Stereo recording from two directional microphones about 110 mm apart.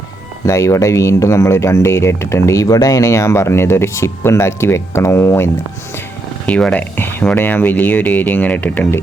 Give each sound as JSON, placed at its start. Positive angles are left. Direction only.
{"t": 0.4, "sound": "speech", "side_deg": 30}
{"t": 6.4, "sound": "speech", "side_deg": 10}